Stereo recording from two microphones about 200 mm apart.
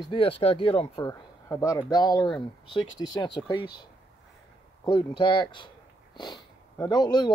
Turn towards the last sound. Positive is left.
turn(degrees=20)  # may be behind; listen again after turning